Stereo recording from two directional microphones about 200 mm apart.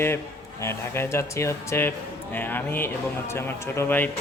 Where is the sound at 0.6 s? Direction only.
15° left (ahead or behind).